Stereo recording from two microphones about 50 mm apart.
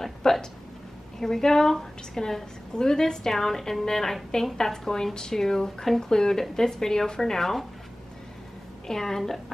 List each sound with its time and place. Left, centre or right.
0.0 s a sound: centre
1.2 s a woman's voice: centre
8.8 s a woman's voice: centre